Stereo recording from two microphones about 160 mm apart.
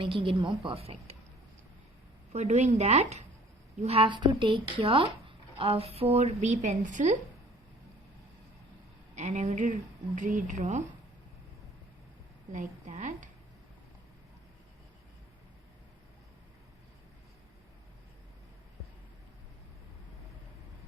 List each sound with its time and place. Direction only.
0.0 s a woman's voice: 35° right (ahead or behind)
2.3 s a woman's voice: 45° right (ahead or behind)
9.1 s a woman's voice: 45° right (ahead or behind)
12.5 s a woman's voice: 50° right (ahead or behind)